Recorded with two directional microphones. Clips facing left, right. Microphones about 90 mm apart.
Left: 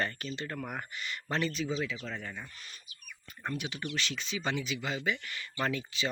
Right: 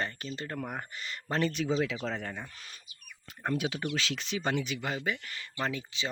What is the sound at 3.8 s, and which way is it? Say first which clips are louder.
Speech: right 3 dB; 80° right.